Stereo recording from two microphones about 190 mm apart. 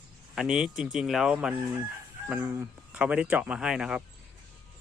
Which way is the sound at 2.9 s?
5° right (ahead or behind).